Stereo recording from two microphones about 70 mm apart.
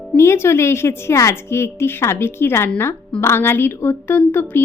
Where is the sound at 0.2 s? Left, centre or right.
Left.